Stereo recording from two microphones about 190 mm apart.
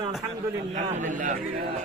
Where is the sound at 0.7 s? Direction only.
40° right (ahead or behind).